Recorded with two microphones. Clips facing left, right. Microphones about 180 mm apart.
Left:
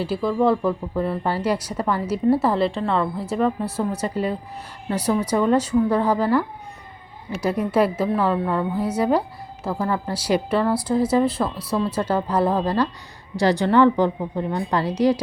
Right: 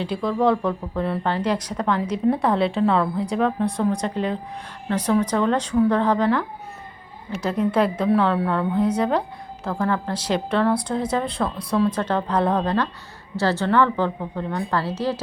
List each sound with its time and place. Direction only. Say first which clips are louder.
0.0 s a woman's voice: left 1 dB; 5° left (ahead or behind)